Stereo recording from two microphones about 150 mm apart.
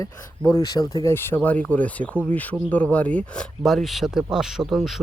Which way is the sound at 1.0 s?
15° left (ahead or behind).